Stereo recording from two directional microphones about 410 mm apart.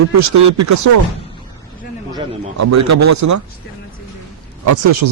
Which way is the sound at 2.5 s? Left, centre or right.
Right.